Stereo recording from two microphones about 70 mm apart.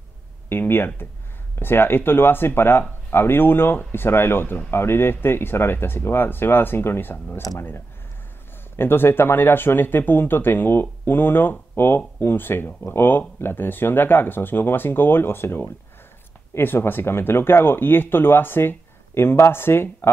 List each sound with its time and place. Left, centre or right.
0.5 s speech: left